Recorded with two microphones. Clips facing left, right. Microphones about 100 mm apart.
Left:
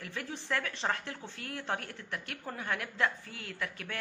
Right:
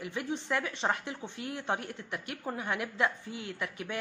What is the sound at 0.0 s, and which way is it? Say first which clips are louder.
A woman's voice: right 5 dB; 15° right (ahead or behind).